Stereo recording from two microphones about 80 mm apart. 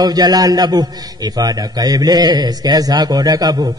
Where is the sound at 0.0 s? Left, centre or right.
Right.